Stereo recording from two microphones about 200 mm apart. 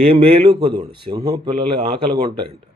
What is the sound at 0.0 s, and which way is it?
Speech, 30° right (ahead or behind).